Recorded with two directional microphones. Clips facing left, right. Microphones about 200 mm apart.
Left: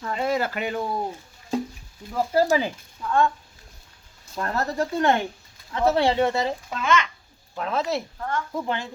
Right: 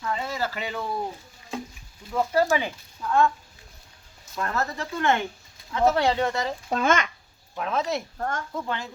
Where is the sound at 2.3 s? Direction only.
35° left (ahead or behind).